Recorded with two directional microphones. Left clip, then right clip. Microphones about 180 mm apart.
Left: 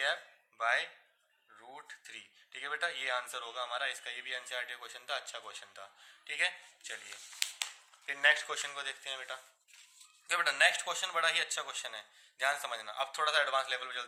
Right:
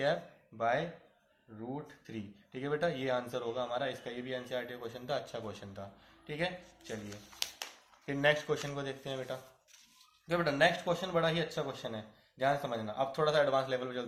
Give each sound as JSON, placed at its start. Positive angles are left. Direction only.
{"t": 0.0, "sound": "speech", "side_deg": 25}